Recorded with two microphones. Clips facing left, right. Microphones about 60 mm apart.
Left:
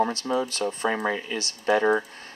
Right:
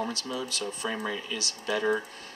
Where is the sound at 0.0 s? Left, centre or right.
Left.